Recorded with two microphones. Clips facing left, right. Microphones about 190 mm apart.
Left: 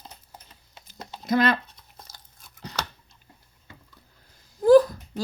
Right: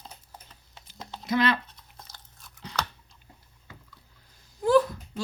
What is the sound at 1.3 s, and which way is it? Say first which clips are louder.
Speech: left 3 dB; 45° left (ahead or behind).